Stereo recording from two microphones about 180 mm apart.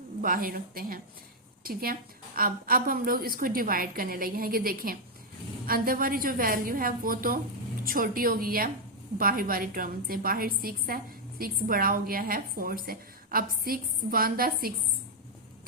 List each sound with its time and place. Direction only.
0.2 s a woman's voice: 50° right (ahead or behind)